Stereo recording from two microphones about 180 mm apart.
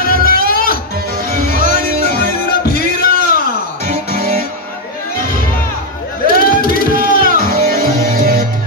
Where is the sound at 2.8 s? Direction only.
60° left (ahead or behind).